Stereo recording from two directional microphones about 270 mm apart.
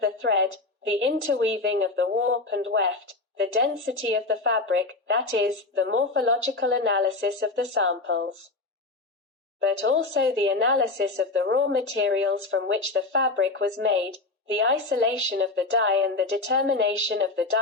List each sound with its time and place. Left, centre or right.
0.0 s a sound: right
0.9 s a woman's voice: right
9.6 s speech: right